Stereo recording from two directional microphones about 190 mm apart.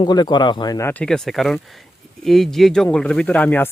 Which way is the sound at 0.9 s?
5° left (ahead or behind).